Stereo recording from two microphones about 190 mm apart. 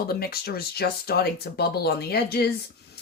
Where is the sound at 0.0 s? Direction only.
55° left (ahead or behind).